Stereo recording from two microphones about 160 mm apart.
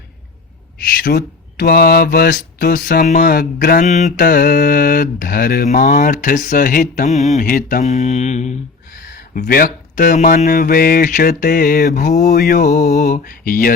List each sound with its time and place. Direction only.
1.0 s speech: 70° left (ahead or behind)
3.8 s speech: 50° left (ahead or behind); by 5.6 s 70° left (ahead or behind)
5.6 s speech: 55° left (ahead or behind)
7.3 s mantra: 60° left (ahead or behind)
9.0 s speech: 60° left (ahead or behind)